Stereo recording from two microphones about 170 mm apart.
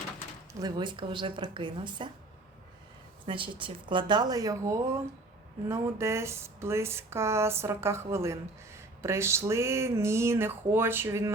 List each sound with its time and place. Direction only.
0.6 s a woman's voice: 25° right (ahead or behind)
3.2 s a woman's voice: 30° right (ahead or behind)